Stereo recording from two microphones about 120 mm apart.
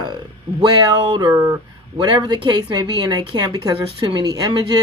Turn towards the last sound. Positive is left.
turn(degrees=-35)  # may be behind; listen again after turning